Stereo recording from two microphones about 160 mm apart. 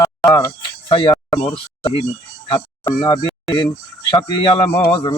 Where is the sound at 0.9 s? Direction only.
35° left (ahead or behind).